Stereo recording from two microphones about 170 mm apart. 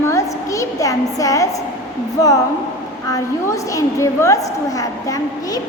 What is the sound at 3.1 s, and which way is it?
A woman's voice, 20° left (ahead or behind).